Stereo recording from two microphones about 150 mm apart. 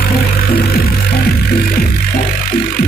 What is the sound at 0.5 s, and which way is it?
Music, 90° left.